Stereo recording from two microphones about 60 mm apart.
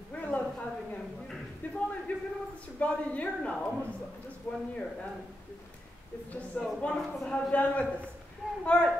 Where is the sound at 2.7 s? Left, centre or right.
Left.